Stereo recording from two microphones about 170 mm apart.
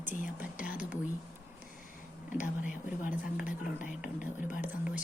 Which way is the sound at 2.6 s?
50° left (ahead or behind).